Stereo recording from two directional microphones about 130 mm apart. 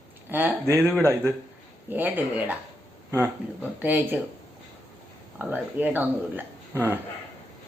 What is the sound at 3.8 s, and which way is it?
Speech, 15° right (ahead or behind).